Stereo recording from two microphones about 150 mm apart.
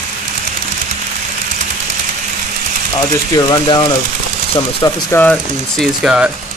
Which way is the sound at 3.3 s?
30° left (ahead or behind).